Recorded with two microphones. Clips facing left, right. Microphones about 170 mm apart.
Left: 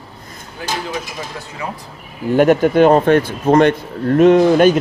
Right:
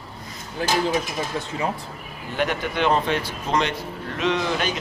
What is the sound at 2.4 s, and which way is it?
A man's voice, 45° left (ahead or behind).